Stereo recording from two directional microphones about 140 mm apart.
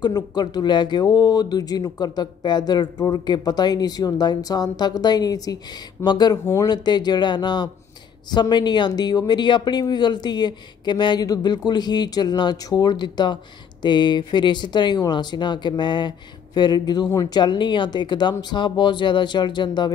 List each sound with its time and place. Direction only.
0.0 s speech: 30° left (ahead or behind)